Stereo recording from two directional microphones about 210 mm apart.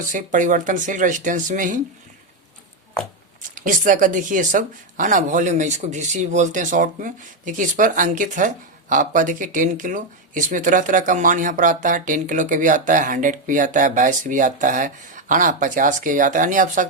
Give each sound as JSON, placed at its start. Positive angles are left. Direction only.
{"t": 0.1, "sound": "speech", "side_deg": -35}
{"t": 3.5, "sound": "speech", "side_deg": -40}